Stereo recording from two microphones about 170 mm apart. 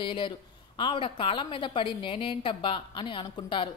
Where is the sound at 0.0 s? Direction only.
30° left (ahead or behind).